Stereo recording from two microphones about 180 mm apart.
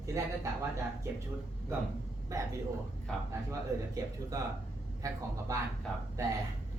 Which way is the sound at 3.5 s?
20° right (ahead or behind).